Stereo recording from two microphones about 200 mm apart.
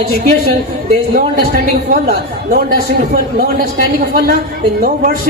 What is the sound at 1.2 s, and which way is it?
A man's voice, 45° right (ahead or behind).